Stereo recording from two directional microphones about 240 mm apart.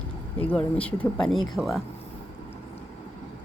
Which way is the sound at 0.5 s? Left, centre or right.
Centre.